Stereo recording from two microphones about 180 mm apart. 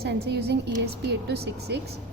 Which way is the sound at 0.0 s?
65° right (ahead or behind).